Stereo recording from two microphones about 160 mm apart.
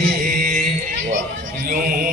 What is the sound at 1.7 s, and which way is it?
Music, 60° right (ahead or behind).